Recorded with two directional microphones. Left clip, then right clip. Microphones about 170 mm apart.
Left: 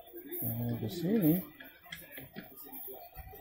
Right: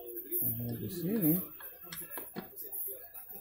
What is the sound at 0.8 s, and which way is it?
Speech, 5° left (ahead or behind).